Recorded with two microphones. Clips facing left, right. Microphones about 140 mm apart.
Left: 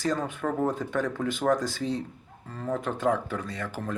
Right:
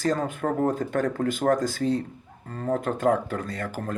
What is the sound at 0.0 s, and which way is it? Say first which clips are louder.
Speech: right 3 dB; 50° right (ahead or behind).